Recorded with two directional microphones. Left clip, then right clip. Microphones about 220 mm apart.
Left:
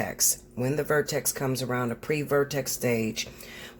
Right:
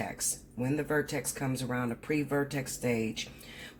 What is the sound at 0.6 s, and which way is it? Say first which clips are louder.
Speech: left 5 dB; 50° left (ahead or behind).